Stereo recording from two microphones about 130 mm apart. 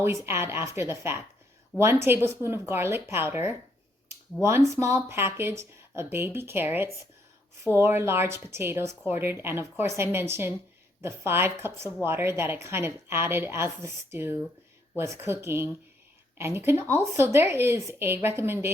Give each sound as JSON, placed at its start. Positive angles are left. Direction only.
{"t": 0.0, "sound": "a woman's voice", "side_deg": -20}
{"t": 4.4, "sound": "speech", "side_deg": 10}
{"t": 4.7, "sound": "a woman's voice", "side_deg": -25}